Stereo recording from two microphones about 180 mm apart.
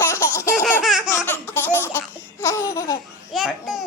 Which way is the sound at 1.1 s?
10° left (ahead or behind).